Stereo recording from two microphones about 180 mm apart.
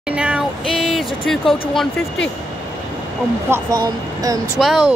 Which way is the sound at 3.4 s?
15° right (ahead or behind).